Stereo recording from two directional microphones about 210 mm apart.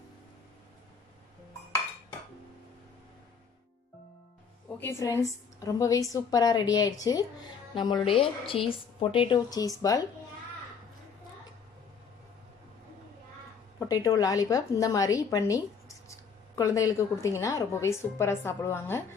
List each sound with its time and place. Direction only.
4.7 s a woman's voice: 10° left (ahead or behind)
13.7 s a woman's voice: 15° left (ahead or behind)